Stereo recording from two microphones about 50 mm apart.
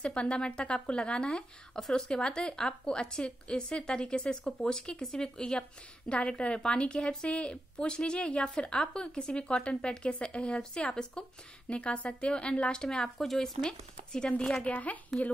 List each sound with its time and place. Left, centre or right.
0.0 s a woman's voice: left
1.8 s a woman's voice: centre
14.5 s speech: left